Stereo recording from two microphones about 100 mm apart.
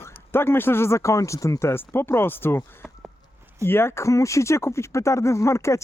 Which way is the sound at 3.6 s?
25° left (ahead or behind).